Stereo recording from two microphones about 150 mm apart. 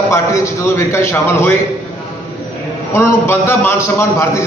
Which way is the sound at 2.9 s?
15° left (ahead or behind).